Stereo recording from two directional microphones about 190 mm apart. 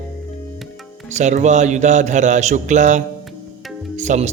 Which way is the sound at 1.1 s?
40° right (ahead or behind).